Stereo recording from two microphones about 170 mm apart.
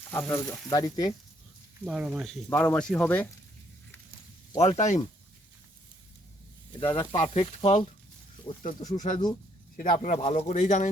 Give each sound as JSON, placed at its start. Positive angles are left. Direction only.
{"t": 0.1, "sound": "speech", "side_deg": 15}
{"t": 1.8, "sound": "speech", "side_deg": -5}
{"t": 4.8, "sound": "speech", "side_deg": 45}
{"t": 6.8, "sound": "speech", "side_deg": 15}
{"t": 7.1, "sound": "speech", "side_deg": 35}